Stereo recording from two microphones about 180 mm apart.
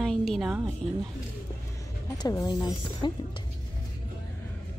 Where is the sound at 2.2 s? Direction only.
20° left (ahead or behind).